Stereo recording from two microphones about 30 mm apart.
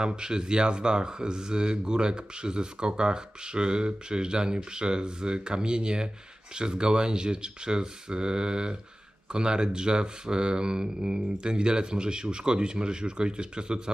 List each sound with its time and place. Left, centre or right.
0.0 s speech: right